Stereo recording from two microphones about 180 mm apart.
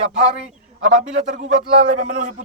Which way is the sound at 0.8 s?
45° right (ahead or behind).